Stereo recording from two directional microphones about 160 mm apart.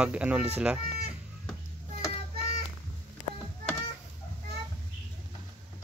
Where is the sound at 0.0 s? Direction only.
5° right (ahead or behind).